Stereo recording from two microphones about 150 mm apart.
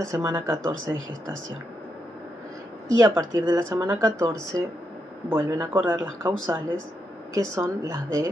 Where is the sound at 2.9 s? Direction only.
25° right (ahead or behind).